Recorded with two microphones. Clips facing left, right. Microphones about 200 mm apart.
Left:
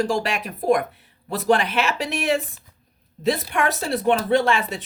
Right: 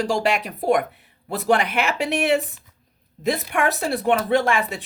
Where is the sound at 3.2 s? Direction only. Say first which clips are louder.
Even; 15° right (ahead or behind).